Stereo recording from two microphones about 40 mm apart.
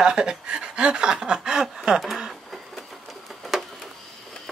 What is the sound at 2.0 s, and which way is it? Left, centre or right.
Speech, centre.